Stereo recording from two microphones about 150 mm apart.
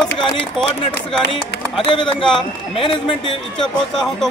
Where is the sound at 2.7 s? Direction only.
35° left (ahead or behind).